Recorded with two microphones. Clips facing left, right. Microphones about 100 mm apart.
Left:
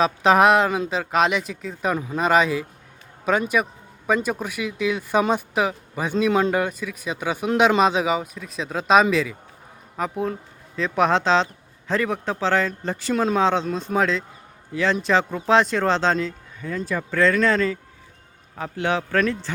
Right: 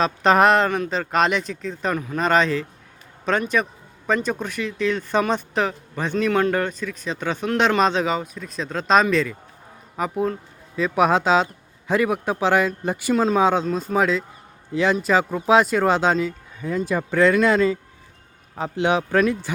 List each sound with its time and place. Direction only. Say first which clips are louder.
0.0 s speech: even; 5° left (ahead or behind)
2.0 s a man's voice: even; 20° left (ahead or behind)
2.2 s a man's voice: even; 5° left (ahead or behind); by 19.5 s 15° right (ahead or behind)